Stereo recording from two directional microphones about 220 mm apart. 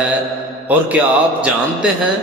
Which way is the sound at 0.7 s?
5° right (ahead or behind).